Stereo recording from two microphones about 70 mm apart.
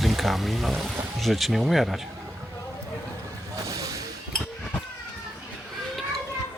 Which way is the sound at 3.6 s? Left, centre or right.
Right.